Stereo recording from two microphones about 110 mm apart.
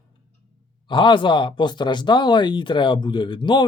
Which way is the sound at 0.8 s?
45° left (ahead or behind).